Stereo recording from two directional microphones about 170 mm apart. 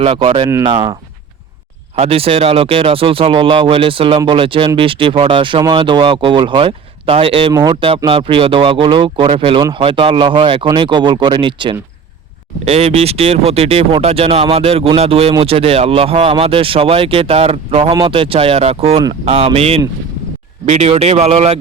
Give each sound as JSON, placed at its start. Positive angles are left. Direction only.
{"t": 0.0, "sound": "speech", "side_deg": -35}
{"t": 2.0, "sound": "speech", "side_deg": -35}